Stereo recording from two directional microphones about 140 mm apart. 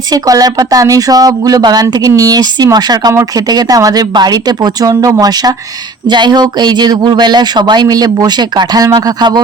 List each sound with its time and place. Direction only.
0.1 s speech: 25° right (ahead or behind)